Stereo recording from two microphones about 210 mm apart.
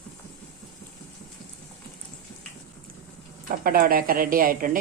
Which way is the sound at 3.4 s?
45° right (ahead or behind).